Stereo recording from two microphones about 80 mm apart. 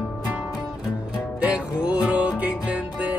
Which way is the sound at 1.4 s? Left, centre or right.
Centre.